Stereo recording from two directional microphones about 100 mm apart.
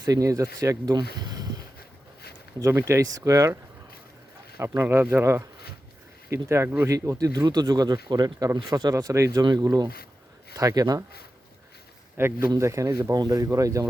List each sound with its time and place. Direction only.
0.0 s speech: 35° right (ahead or behind)
2.6 s speech: 30° right (ahead or behind)
9.4 s speech: 45° right (ahead or behind)
12.1 s a man's voice: 25° right (ahead or behind)